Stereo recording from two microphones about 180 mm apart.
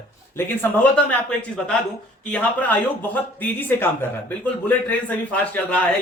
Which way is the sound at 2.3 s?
10° left (ahead or behind).